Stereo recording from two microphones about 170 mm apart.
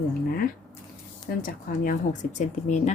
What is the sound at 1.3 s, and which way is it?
Speech, 60° left (ahead or behind).